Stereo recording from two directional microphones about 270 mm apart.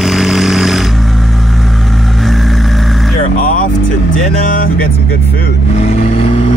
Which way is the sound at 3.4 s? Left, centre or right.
Left.